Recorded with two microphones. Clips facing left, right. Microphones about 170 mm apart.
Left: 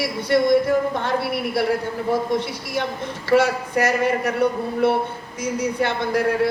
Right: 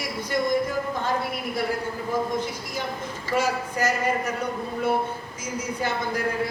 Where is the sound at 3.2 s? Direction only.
70° left (ahead or behind).